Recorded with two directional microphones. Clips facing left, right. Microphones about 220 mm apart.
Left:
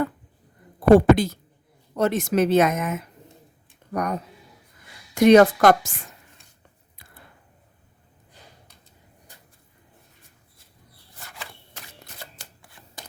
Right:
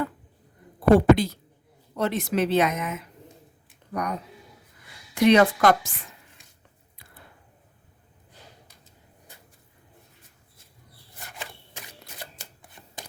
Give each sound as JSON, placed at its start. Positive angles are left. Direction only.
{"t": 0.9, "sound": "a woman's voice", "side_deg": 50}
{"t": 12.8, "sound": "rub", "side_deg": -20}